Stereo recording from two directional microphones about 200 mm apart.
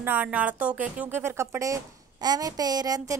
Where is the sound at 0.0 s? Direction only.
5° right (ahead or behind).